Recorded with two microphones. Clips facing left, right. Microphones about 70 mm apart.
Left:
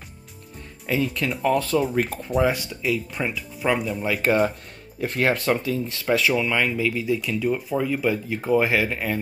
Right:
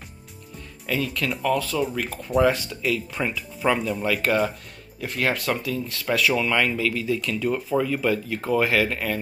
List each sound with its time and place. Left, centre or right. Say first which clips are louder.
0.8 s speech: left 2 dB; left
1.5 s speech: left 3 dB; left
2.4 s speech: right 2 dB; centre
4.0 s speech: left 1 dB; centre
5.0 s speech: left 3 dB; left
6.3 s speech: even; centre